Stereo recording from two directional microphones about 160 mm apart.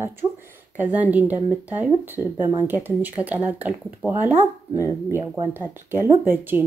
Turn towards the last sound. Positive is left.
turn(degrees=-15)  # may be behind; listen again after turning